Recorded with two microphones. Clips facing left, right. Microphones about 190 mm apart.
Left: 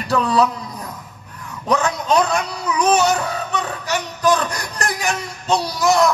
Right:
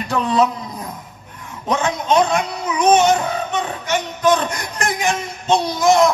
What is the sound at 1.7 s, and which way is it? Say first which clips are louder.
Speech: even; 25° right (ahead or behind).